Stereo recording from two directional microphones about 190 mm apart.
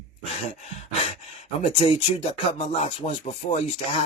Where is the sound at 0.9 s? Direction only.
35° left (ahead or behind).